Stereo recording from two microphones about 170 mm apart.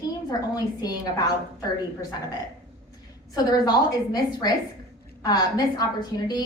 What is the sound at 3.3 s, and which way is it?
Speech, 25° left (ahead or behind).